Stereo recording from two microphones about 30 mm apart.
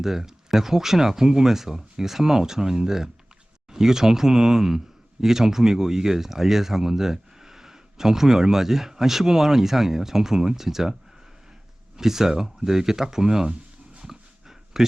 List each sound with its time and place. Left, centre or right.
0.0 s speech: centre
11.9 s speech: centre
14.0 s a sound: centre